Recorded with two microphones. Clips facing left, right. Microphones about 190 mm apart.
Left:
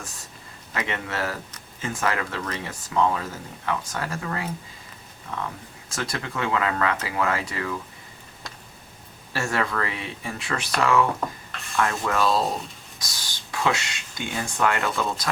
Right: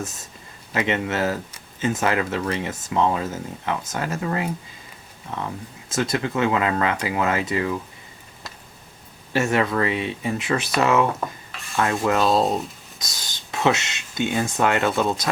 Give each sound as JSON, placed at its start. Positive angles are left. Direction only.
{"t": 0.7, "sound": "speech", "side_deg": -20}
{"t": 9.3, "sound": "speech", "side_deg": -20}